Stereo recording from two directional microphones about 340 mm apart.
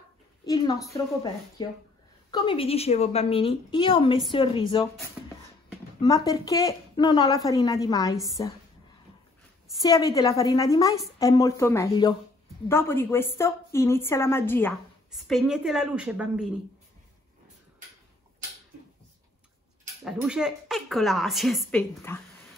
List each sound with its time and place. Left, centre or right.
0.5 s a woman's voice: centre
5.9 s a woman's voice: centre
9.8 s a woman's voice: centre
20.1 s speech: centre